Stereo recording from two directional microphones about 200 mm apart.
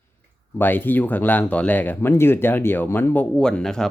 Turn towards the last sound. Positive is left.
turn(degrees=5)  # may be behind; listen again after turning